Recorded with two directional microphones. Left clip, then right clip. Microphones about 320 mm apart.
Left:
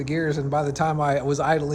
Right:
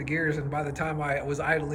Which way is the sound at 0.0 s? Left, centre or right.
Centre.